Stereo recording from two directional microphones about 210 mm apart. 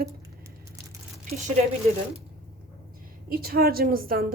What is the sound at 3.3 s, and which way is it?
Speech, 45° right (ahead or behind).